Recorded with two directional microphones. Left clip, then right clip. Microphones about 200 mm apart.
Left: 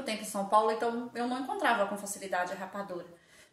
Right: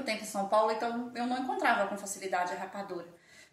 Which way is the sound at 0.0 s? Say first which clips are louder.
Right 1 dB; 15° left (ahead or behind).